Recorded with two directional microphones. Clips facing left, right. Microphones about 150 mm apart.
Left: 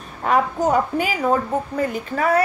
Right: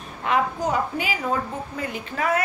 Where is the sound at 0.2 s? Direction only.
45° left (ahead or behind).